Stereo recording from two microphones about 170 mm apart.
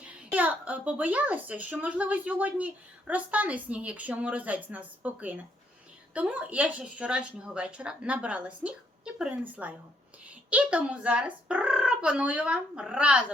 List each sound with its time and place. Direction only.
0.0 s a woman's voice: 5° right (ahead or behind)